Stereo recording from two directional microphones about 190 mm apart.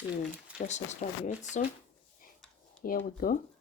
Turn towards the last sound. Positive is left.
turn(degrees=50)  # may be behind; listen again after turning